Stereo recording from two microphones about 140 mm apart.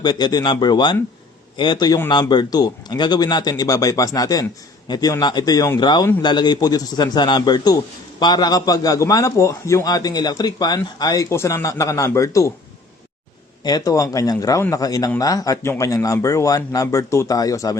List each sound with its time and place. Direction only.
0.0 s a man's voice: 30° left (ahead or behind)
13.7 s a man's voice: 25° left (ahead or behind)